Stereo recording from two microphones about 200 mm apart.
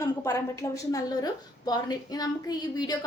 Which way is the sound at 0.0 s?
15° left (ahead or behind).